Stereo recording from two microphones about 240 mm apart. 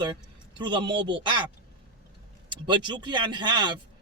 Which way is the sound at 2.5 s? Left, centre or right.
Centre.